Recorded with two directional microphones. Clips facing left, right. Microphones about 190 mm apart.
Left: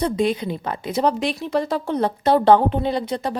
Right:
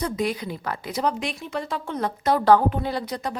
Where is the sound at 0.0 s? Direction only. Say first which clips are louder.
Left 5 dB; 25° left (ahead or behind).